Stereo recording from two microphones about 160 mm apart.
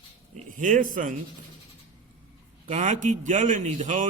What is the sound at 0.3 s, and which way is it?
Speech, 55° right (ahead or behind).